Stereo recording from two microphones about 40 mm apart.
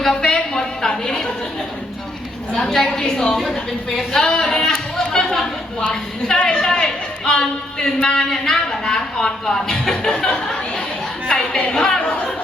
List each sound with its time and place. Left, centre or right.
0.0 s speech: centre
0.3 s a sound: centre
2.6 s a man's voice: centre
11.7 s speech: centre